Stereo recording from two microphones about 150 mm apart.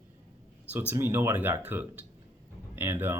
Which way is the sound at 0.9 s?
15° right (ahead or behind).